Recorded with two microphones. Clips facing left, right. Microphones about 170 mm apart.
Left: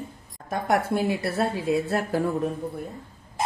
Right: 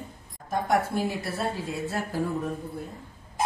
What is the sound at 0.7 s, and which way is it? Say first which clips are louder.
Speech: left 3 dB; 70° left (ahead or behind).